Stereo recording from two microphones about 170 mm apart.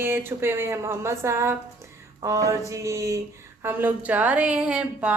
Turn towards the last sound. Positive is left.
turn(degrees=-5)  # may be behind; listen again after turning